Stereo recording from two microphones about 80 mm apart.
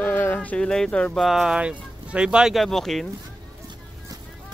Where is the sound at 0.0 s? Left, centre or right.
Left.